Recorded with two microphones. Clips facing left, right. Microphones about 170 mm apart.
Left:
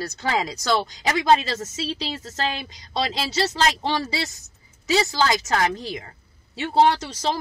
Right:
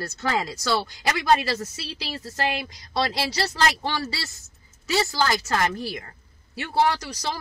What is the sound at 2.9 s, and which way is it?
Speech, 20° left (ahead or behind).